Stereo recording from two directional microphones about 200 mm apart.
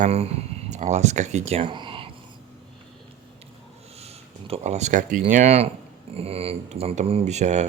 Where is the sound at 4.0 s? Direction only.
30° right (ahead or behind).